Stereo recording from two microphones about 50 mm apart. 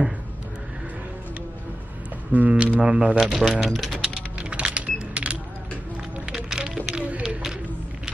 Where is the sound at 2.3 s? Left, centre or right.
Right.